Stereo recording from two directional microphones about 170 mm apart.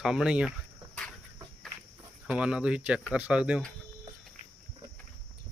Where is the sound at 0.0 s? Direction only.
5° right (ahead or behind).